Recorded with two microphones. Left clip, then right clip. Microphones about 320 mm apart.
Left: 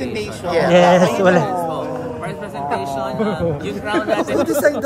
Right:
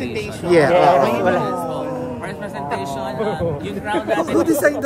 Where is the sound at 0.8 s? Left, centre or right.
Left.